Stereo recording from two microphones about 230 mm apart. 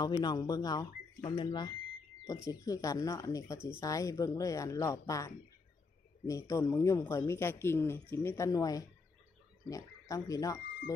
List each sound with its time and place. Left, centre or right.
0.0 s speech: centre